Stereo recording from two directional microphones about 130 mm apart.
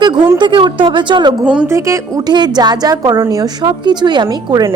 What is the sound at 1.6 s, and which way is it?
A woman's voice, 20° right (ahead or behind).